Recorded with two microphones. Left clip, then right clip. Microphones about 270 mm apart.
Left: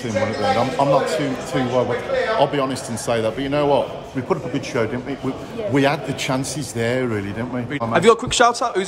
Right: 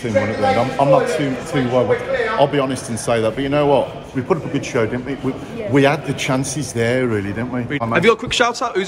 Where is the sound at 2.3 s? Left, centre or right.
Centre.